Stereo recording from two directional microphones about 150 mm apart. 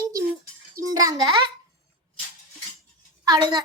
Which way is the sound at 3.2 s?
25° right (ahead or behind).